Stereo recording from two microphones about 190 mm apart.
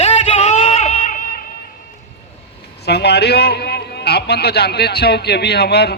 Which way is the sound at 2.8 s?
60° left (ahead or behind).